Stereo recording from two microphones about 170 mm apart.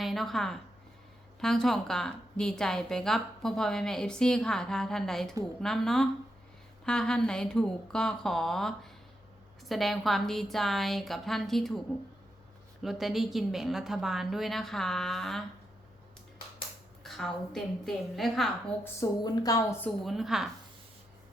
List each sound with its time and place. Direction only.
0.0 s a woman's voice: centre (ahead or behind)
12.8 s a woman's voice: centre (ahead or behind)
17.0 s a woman's voice: centre (ahead or behind)
18.9 s a woman's voice: 20° left (ahead or behind)
20.1 s a woman's voice: centre (ahead or behind)